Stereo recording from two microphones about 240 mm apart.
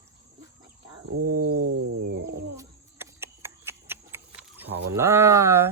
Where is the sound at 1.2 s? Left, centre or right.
Right.